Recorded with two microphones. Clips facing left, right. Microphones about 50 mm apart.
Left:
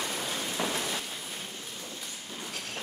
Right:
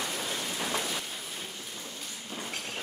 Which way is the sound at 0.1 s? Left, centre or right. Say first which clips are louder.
Even; centre.